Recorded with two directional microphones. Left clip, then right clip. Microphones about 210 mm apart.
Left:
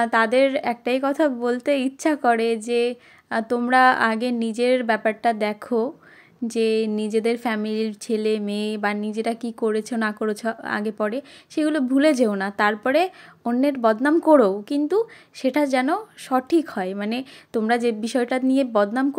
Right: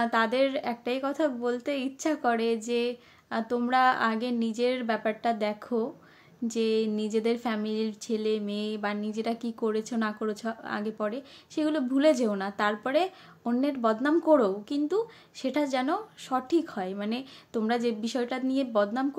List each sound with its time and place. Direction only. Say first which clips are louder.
0.0 s a woman's voice: left 7 dB; 30° left (ahead or behind)